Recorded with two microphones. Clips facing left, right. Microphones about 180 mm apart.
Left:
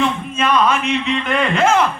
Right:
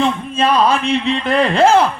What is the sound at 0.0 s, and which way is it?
A man's voice, 30° right (ahead or behind).